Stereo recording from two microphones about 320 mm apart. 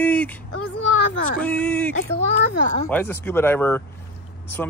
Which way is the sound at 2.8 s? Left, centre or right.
Centre.